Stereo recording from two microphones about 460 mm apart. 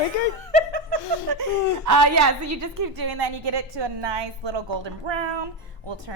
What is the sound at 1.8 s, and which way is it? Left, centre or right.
A woman's voice, right.